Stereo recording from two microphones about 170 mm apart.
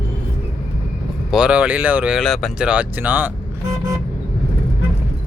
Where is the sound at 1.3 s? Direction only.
5° right (ahead or behind).